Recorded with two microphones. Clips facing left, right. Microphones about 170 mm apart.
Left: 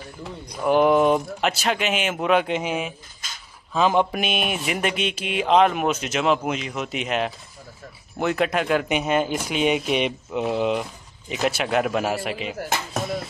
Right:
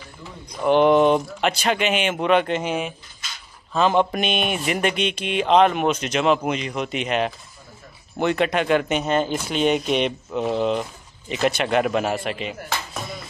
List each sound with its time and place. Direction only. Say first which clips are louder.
0.6 s speech: right 2 dB; 5° left (ahead or behind)